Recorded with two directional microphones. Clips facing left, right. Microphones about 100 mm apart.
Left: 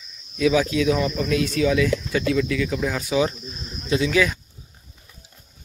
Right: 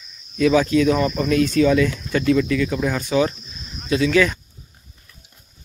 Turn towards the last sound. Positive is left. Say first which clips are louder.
# right 3 dB
turn(degrees=10)  # may be behind; listen again after turning